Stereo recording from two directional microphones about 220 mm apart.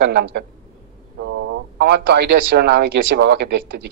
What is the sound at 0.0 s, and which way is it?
Speech, 50° right (ahead or behind).